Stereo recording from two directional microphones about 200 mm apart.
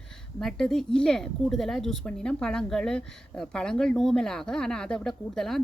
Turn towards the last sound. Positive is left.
turn(degrees=0)  # may be behind; listen again after turning